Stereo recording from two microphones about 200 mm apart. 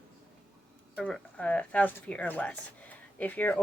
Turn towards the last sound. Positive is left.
turn(degrees=10)  # may be behind; listen again after turning